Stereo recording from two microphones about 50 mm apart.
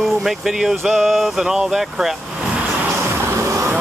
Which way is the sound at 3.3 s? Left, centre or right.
Right.